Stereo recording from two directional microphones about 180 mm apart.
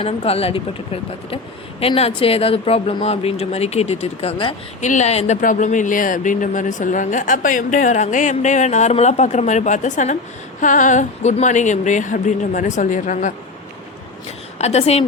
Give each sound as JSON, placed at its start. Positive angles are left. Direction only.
{"t": 0.0, "sound": "speech", "side_deg": 35}
{"t": 1.8, "sound": "speech", "side_deg": 35}
{"t": 14.6, "sound": "speech", "side_deg": 35}